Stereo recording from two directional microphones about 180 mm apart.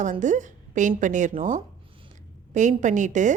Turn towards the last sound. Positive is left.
turn(degrees=-45)  # may be behind; listen again after turning